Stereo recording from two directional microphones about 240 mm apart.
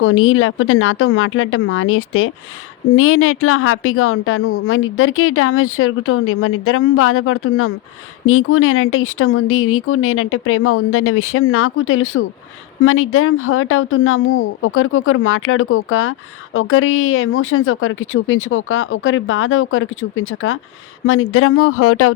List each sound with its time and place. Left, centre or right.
0.0 s speech: left